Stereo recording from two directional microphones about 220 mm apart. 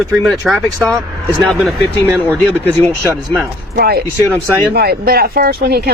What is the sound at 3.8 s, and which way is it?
Speech, 45° right (ahead or behind).